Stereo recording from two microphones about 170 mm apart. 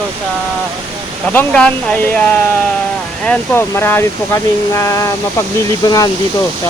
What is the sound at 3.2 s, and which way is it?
Speech, 10° left (ahead or behind).